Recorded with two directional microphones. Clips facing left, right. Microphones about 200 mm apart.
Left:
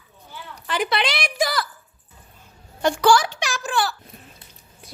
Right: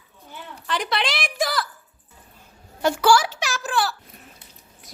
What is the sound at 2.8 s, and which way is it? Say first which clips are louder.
A child's voice: left 1 dB; 5° right (ahead or behind).